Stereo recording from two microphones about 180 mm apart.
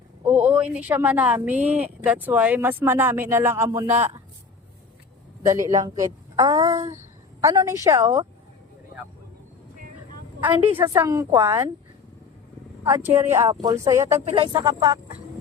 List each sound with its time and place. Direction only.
0.3 s speech: 10° right (ahead or behind)
1.5 s a woman's voice: 40° right (ahead or behind)
1.8 s speech: 10° right (ahead or behind)
5.5 s a woman's voice: 15° right (ahead or behind)
10.8 s speech: 15° right (ahead or behind)
13.1 s speech: 15° right (ahead or behind)
14.3 s a woman's voice: 30° right (ahead or behind)